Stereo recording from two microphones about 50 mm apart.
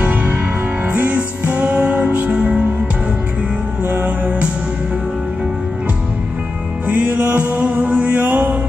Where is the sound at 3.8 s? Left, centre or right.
Right.